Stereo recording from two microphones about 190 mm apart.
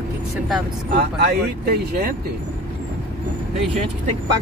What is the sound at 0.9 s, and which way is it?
Speech, 55° right (ahead or behind).